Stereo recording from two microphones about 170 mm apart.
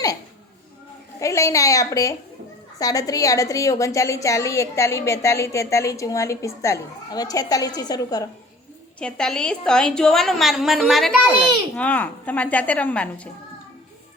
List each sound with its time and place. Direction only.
1.2 s a woman's voice: 20° left (ahead or behind)
9.0 s a woman's voice: 5° left (ahead or behind)